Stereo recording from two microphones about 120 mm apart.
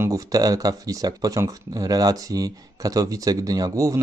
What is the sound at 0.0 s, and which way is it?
Speech, 30° right (ahead or behind).